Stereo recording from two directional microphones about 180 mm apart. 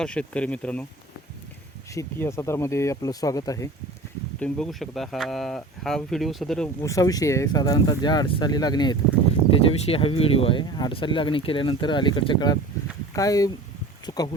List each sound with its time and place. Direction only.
0.0 s speech: 5° left (ahead or behind)
1.9 s speech: 15° left (ahead or behind)
4.4 s speech: 5° left (ahead or behind)
6.8 s speech: 20° left (ahead or behind)
14.1 s a sound: 20° left (ahead or behind)